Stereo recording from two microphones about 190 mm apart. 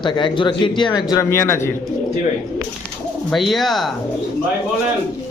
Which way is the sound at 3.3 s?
Centre (ahead or behind).